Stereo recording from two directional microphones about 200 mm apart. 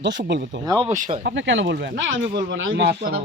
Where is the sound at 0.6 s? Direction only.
20° right (ahead or behind).